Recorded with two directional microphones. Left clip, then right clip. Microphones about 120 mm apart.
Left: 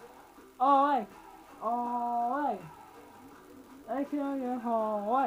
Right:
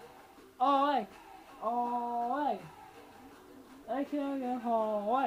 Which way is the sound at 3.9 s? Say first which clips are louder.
Left 1 dB; 30° right (ahead or behind).